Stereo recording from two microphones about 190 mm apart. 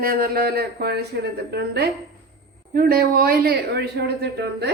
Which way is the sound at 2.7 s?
50° right (ahead or behind).